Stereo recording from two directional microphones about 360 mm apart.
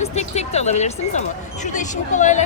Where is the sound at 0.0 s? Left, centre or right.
Centre.